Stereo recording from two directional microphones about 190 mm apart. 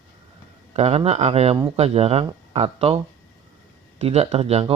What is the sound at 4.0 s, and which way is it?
Speech, 35° right (ahead or behind).